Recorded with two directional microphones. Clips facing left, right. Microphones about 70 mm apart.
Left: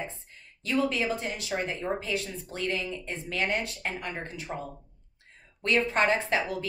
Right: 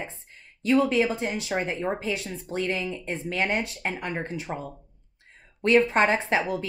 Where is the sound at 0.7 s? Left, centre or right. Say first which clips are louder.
Right 6 dB; right.